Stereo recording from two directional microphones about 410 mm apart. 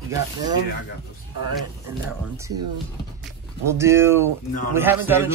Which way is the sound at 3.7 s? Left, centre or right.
Centre.